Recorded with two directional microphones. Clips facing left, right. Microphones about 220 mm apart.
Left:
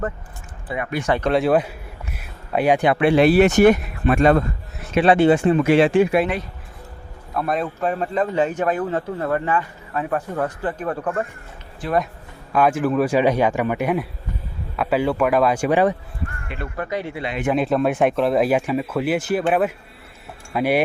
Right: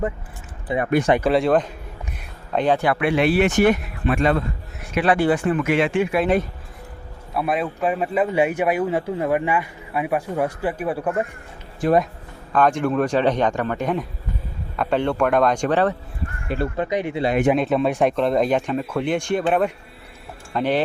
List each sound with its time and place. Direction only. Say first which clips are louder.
0.7 s speech: right 4 dB; 20° right (ahead or behind)
1.2 s speech: even; centre (ahead or behind); by 4.4 s 45° left (ahead or behind)
4.9 s speech: left 4 dB; 25° left (ahead or behind)
7.3 s a man's voice: even; 5° right (ahead or behind)
11.8 s speech: right 5 dB; 45° right (ahead or behind)
12.5 s speech: left 1 dB; 5° left (ahead or behind)
16.7 s speech: right 4 dB; 20° right (ahead or behind)
17.6 s speech: left 1 dB; centre (ahead or behind)